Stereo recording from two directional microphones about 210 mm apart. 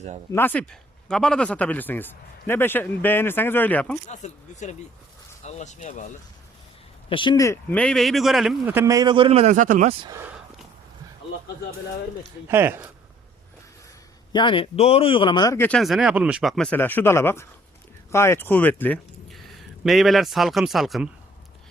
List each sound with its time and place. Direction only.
0.3 s speech: 10° left (ahead or behind)
4.0 s speech: 35° left (ahead or behind)
7.1 s speech: 20° left (ahead or behind); by 9.9 s 40° right (ahead or behind)
10.0 s speech: 15° right (ahead or behind)
12.5 s speech: 10° right (ahead or behind)
14.3 s speech: 25° left (ahead or behind); by 21.1 s centre (ahead or behind)